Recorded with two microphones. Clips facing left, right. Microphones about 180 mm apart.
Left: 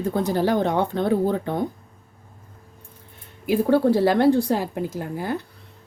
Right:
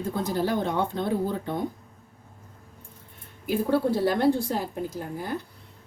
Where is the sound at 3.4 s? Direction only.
75° left (ahead or behind).